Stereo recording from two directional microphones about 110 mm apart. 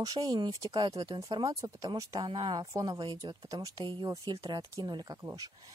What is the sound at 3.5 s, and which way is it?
A woman's voice, 35° right (ahead or behind).